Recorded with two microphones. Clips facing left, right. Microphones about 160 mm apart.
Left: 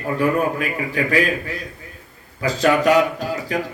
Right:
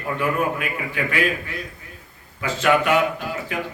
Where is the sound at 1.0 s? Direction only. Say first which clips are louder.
Left 4 dB; 35° left (ahead or behind).